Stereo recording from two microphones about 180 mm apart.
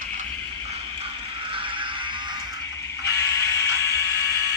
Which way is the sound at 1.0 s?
30° right (ahead or behind).